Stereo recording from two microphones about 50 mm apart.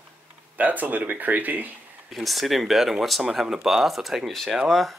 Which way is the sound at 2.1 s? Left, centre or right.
Centre.